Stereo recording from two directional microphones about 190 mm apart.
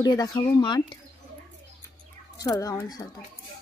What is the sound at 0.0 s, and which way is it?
Speech, 20° left (ahead or behind).